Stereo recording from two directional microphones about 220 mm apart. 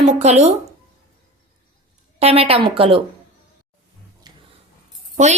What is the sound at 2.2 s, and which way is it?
Speech, 25° right (ahead or behind).